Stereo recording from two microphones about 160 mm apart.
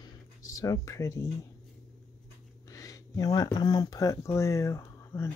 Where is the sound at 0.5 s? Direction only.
20° left (ahead or behind).